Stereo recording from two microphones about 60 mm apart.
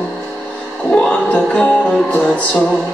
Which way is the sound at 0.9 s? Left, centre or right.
Centre.